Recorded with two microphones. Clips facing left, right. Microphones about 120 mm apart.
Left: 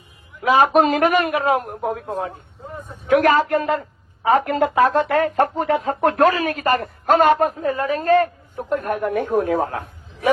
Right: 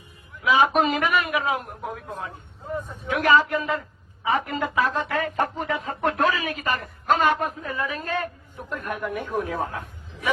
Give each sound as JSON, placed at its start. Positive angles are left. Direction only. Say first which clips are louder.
{"t": 0.4, "sound": "a woman's voice", "louder": "left 5 dB", "side_deg": 45}
{"t": 3.1, "sound": "a woman's voice", "louder": "left 5 dB", "side_deg": 45}